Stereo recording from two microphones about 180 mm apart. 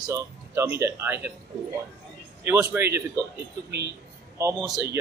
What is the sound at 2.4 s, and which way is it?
Speech, 15° right (ahead or behind).